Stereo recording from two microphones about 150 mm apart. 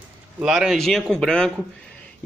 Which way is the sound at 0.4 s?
Centre (ahead or behind).